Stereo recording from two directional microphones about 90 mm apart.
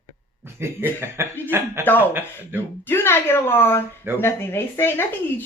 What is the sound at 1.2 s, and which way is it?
Speech, 30° right (ahead or behind).